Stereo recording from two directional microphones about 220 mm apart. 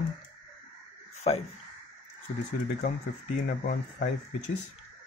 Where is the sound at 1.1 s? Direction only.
30° left (ahead or behind).